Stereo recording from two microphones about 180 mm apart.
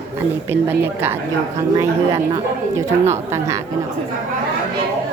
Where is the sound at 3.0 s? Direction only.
15° right (ahead or behind).